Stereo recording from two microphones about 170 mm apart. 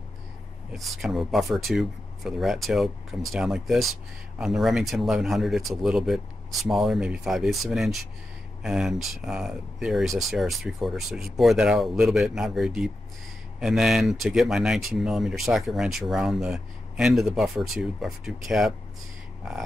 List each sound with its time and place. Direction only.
0.7 s speech: centre (ahead or behind)